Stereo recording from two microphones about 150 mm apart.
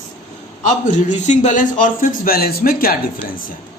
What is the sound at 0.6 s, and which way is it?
A man's voice, 55° left (ahead or behind).